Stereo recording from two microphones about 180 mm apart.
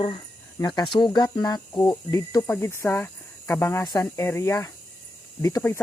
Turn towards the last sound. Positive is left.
turn(degrees=15)  # may be behind; listen again after turning